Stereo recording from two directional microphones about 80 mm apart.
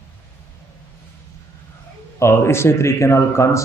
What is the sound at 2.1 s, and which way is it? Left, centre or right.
Speech, left.